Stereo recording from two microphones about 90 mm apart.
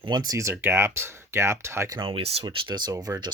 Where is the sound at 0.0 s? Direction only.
55° right (ahead or behind).